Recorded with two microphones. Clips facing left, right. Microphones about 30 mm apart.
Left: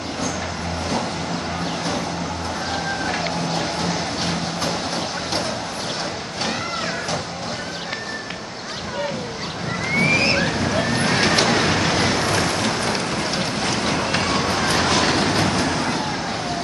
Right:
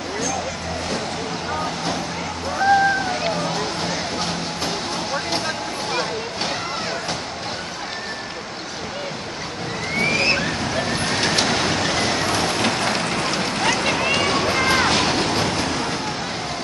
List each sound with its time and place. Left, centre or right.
9.9 s vehicle: centre
12.5 s vehicle: centre
13.7 s run: centre
14.3 s a sound: centre
15.1 s vehicle: centre